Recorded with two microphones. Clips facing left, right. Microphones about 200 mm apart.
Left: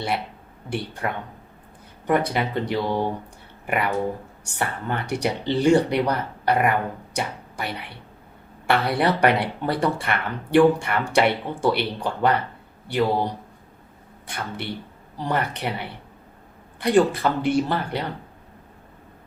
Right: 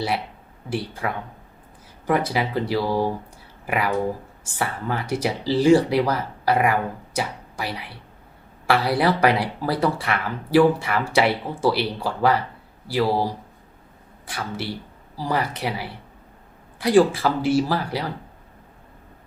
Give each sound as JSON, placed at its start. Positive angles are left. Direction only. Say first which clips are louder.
{"t": 0.7, "sound": "speech", "louder": "right 1 dB", "side_deg": 0}